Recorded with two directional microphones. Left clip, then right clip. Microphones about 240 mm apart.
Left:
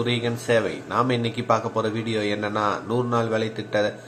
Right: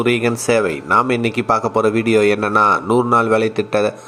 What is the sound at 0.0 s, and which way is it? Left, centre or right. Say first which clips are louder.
Speech: right 9 dB; right.